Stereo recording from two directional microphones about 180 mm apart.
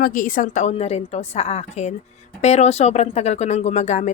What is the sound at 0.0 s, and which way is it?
Speech, 50° left (ahead or behind).